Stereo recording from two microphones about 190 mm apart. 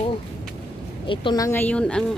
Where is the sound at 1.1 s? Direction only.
25° left (ahead or behind).